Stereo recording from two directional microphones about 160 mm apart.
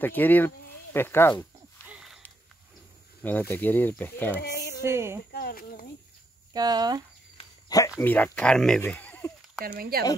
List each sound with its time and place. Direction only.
0.0 s speech: 10° left (ahead or behind)
1.9 s a sound: 5° right (ahead or behind)
3.2 s speech: 10° left (ahead or behind)
4.4 s a sound: 90° left
4.8 s speech: 15° right (ahead or behind)
5.3 s speech: 70° left (ahead or behind)
6.5 s speech: 25° right (ahead or behind)
8.0 s speech: 10° left (ahead or behind)
9.7 s speech: 70° right (ahead or behind)